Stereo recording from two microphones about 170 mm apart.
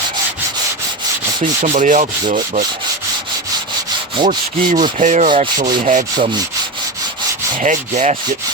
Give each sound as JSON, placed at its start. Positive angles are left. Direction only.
{"t": 1.6, "sound": "rub", "side_deg": -45}
{"t": 4.3, "sound": "rub", "side_deg": -45}
{"t": 7.6, "sound": "rub", "side_deg": -45}